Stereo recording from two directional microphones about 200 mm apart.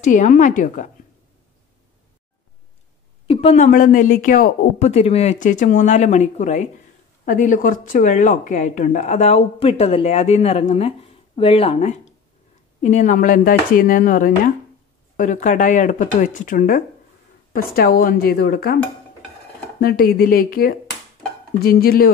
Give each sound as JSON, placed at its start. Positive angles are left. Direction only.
{"t": 0.0, "sound": "speech", "side_deg": 40}
{"t": 3.3, "sound": "speech", "side_deg": 30}
{"t": 19.8, "sound": "speech", "side_deg": 50}